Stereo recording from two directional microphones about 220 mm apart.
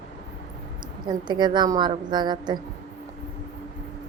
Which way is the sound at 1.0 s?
20° right (ahead or behind).